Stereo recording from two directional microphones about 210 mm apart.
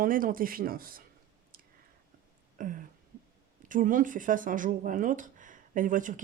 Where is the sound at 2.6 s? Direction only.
40° right (ahead or behind).